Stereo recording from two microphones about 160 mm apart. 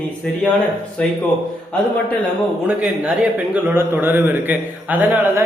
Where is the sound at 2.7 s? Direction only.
5° right (ahead or behind).